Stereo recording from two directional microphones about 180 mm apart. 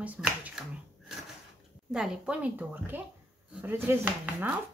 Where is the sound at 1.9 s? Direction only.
5° right (ahead or behind).